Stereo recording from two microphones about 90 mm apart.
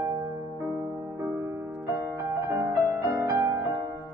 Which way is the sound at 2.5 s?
35° right (ahead or behind).